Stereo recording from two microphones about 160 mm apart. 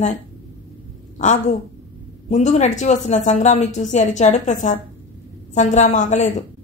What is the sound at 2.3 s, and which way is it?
A woman's voice, 50° left (ahead or behind).